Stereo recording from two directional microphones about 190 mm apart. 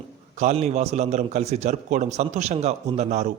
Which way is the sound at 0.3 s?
35° right (ahead or behind).